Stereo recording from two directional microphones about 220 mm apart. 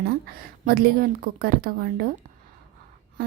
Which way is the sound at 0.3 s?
45° right (ahead or behind).